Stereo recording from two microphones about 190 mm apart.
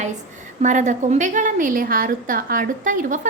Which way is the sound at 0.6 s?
40° right (ahead or behind).